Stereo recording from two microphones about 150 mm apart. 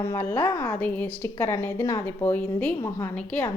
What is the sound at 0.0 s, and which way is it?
A woman's voice, 15° left (ahead or behind).